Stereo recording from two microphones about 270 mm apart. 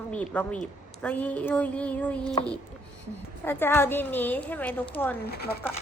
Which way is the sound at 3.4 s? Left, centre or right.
Centre.